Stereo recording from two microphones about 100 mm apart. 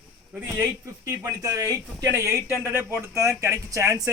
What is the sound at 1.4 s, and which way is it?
Speech, 35° right (ahead or behind).